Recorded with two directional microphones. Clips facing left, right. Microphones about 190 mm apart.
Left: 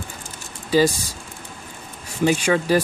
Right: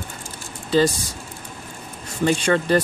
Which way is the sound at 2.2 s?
10° left (ahead or behind).